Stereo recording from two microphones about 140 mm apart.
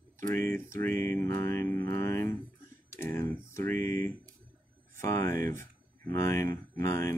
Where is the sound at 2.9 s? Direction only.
15° left (ahead or behind).